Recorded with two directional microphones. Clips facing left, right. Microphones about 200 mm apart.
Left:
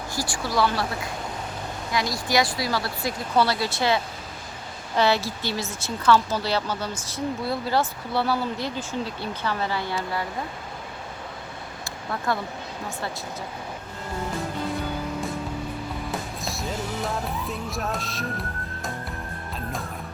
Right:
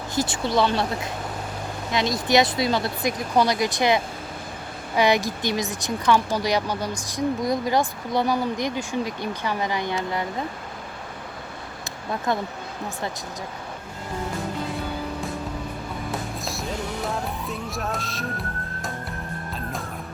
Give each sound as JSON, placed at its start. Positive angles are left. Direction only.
{"t": 0.1, "sound": "speech", "side_deg": -20}
{"t": 12.3, "sound": "speech", "side_deg": -20}
{"t": 16.1, "sound": "music", "side_deg": 0}